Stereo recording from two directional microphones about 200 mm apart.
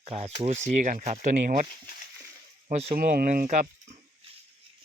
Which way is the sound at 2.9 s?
45° right (ahead or behind).